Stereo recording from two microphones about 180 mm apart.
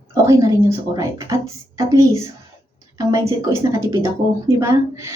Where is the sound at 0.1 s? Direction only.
20° right (ahead or behind).